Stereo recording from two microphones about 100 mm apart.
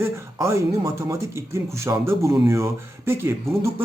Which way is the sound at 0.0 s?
30° right (ahead or behind).